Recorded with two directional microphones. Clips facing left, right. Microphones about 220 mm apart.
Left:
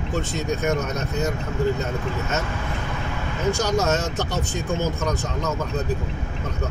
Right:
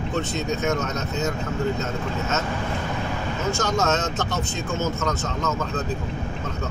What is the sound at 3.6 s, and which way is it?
Speech, 10° left (ahead or behind).